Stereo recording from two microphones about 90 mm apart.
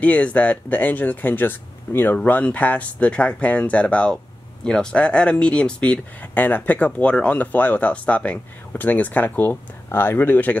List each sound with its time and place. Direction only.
0.0 s speech: 15° left (ahead or behind)